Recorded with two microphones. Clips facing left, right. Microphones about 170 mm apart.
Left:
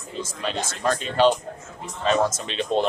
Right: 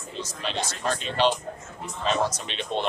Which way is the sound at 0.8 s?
45° left (ahead or behind).